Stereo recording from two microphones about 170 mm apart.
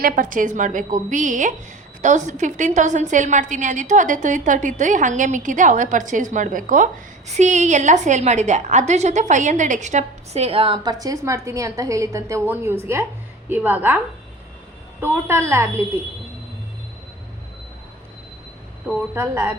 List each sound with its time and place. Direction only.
0.0 s a woman's voice: 55° right (ahead or behind); by 14.0 s 10° right (ahead or behind)
15.0 s a woman's voice: 15° right (ahead or behind)
19.1 s a woman's voice: 15° right (ahead or behind)